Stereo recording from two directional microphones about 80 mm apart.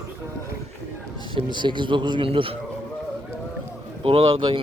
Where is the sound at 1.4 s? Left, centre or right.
Right.